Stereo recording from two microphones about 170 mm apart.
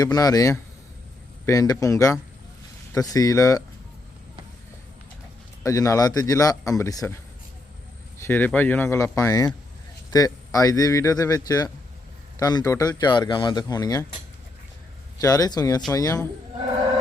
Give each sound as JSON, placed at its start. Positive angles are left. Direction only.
{"t": 0.0, "sound": "speech", "side_deg": 20}
{"t": 5.6, "sound": "speech", "side_deg": 20}
{"t": 8.2, "sound": "speech", "side_deg": 10}
{"t": 15.2, "sound": "speech", "side_deg": 20}